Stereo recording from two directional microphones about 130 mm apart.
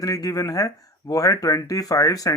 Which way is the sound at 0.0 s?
30° left (ahead or behind).